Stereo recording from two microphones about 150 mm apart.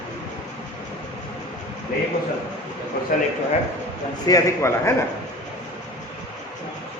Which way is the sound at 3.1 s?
65° left (ahead or behind).